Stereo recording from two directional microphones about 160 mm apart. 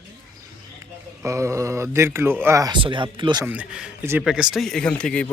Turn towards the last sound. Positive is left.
turn(degrees=5)  # may be behind; listen again after turning